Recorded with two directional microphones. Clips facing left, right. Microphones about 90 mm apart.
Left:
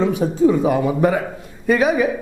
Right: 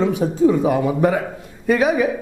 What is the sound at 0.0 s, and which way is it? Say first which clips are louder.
Speech: even; 25° left (ahead or behind).